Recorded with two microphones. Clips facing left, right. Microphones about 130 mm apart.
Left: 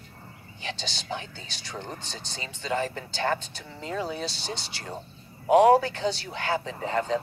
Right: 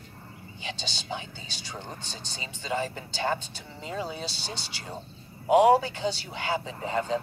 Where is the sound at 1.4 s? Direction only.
5° right (ahead or behind).